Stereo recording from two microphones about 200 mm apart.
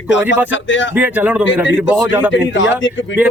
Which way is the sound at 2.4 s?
70° left (ahead or behind).